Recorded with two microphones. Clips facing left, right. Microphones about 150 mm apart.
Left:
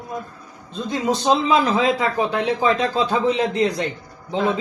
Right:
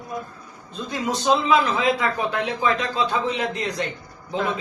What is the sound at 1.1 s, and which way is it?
A man's voice, 30° left (ahead or behind).